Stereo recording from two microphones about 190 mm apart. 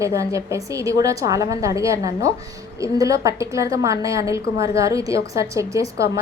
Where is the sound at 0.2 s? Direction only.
15° right (ahead or behind).